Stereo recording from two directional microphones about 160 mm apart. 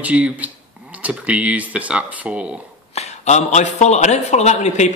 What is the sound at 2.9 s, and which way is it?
Speech, 45° left (ahead or behind).